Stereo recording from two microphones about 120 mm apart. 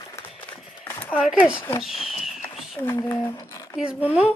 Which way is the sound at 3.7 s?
10° right (ahead or behind).